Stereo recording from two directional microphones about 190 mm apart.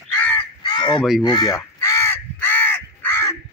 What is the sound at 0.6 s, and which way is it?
Crow, 25° left (ahead or behind).